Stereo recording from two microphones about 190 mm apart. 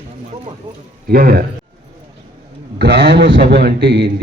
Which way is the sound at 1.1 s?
55° right (ahead or behind).